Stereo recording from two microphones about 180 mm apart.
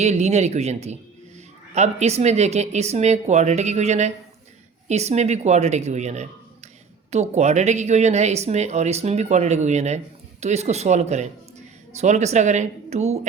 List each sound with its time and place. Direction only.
0.0 s speech: 40° right (ahead or behind)